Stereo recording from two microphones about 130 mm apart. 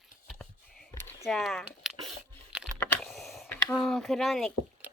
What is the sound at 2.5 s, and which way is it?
Computer keyboard, 5° right (ahead or behind).